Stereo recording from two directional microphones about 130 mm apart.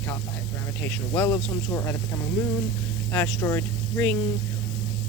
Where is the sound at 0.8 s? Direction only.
15° left (ahead or behind).